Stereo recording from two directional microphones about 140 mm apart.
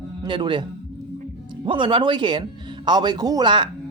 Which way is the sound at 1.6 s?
35° right (ahead or behind).